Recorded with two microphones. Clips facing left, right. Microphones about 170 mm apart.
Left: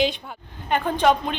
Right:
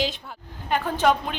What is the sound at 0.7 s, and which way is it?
Speech, 5° right (ahead or behind).